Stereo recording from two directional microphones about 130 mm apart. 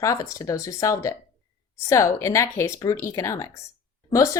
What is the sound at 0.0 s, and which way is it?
A woman's voice, 25° left (ahead or behind).